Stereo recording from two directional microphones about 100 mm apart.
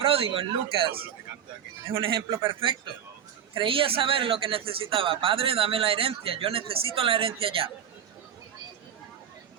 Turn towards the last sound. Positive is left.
turn(degrees=-65)  # may be behind; listen again after turning